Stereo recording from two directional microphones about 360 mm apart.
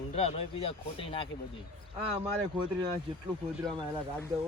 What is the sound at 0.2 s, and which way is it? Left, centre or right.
Speech, centre.